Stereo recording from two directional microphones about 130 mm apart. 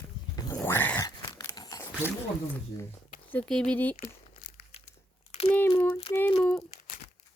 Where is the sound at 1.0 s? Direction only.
30° left (ahead or behind).